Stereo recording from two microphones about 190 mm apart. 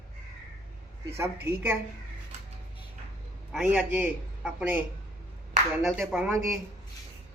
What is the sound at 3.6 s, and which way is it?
Speech, 5° right (ahead or behind).